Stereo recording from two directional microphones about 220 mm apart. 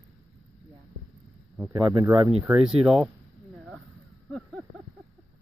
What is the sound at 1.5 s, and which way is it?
Speech, 5° right (ahead or behind).